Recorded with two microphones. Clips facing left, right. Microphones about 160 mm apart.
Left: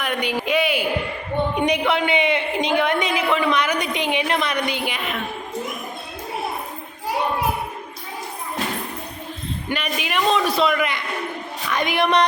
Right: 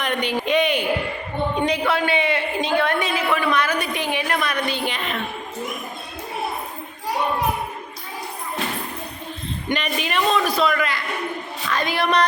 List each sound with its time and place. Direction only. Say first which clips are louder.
0.0 s speech: right 1 dB; 10° left (ahead or behind)
1.5 s a woman's voice: even; 15° left (ahead or behind)
9.6 s a woman's voice: right 2 dB; 5° left (ahead or behind)